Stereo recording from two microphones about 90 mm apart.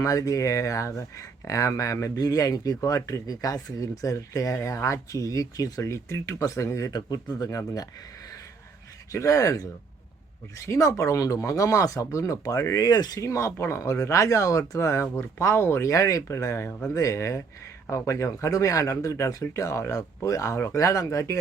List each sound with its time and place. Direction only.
0.0 s speech: 40° left (ahead or behind)
6.9 s speech: 45° left (ahead or behind)
9.1 s speech: 35° left (ahead or behind)
10.7 s speech: 35° left (ahead or behind)